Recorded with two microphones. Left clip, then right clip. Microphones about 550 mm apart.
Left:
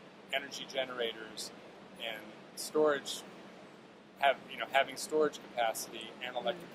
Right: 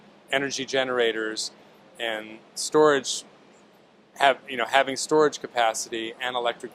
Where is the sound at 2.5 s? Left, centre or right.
Right.